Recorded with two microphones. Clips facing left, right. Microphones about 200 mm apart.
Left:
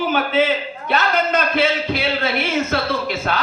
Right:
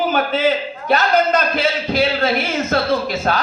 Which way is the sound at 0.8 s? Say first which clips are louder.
Right 4 dB; 40° right (ahead or behind).